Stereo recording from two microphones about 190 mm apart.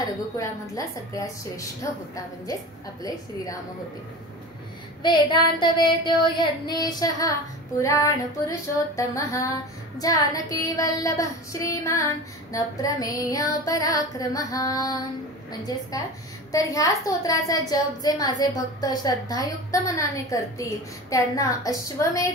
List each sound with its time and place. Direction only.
0.4 s a woman's voice: 15° left (ahead or behind)
3.0 s music: 20° left (ahead or behind)
5.0 s music: 25° left (ahead or behind)
7.8 s a woman's voice: 15° left (ahead or behind)
12.7 s music: 20° left (ahead or behind)
16.5 s a woman's voice: 15° left (ahead or behind)